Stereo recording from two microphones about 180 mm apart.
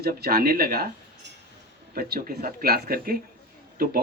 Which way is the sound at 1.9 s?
55° right (ahead or behind).